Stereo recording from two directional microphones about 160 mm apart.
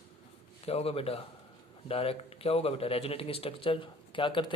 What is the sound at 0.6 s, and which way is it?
Speech, 40° left (ahead or behind).